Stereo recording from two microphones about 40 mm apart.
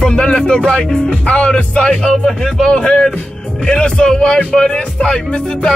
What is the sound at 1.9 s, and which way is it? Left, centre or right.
Speech, centre.